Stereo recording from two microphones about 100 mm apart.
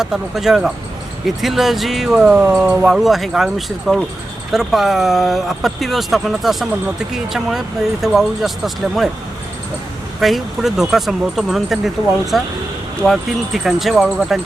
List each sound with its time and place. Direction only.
0.0 s speech: 5° right (ahead or behind)
10.2 s speech: centre (ahead or behind)